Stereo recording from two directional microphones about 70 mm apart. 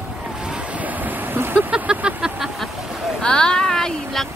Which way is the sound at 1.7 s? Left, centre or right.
Centre.